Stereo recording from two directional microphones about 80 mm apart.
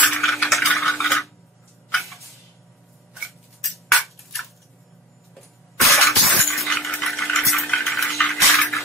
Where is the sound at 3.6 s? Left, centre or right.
Centre.